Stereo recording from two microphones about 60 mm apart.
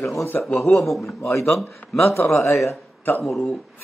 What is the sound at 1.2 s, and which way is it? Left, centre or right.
A man's voice, left.